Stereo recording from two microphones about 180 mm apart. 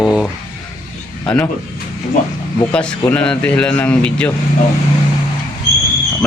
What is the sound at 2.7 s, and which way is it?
A man's voice, 5° left (ahead or behind).